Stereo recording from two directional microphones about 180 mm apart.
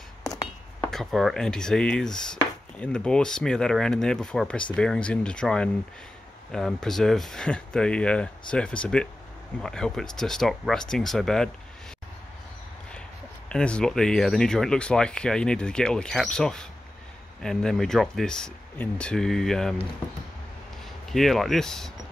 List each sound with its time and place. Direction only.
0.8 s speech: centre (ahead or behind)
13.5 s speech: 5° left (ahead or behind)
21.1 s speech: centre (ahead or behind)